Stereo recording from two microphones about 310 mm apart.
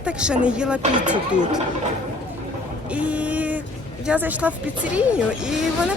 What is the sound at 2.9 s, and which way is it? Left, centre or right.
Boat, centre.